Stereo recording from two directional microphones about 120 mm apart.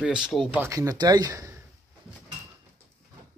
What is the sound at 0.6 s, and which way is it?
Speech, 25° right (ahead or behind).